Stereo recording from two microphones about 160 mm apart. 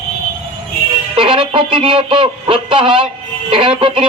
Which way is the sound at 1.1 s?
35° right (ahead or behind).